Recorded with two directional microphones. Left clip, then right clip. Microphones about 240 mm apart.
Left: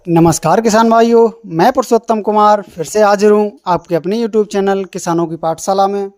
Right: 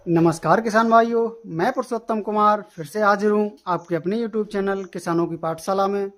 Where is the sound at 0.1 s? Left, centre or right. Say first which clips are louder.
Left 7 dB; left.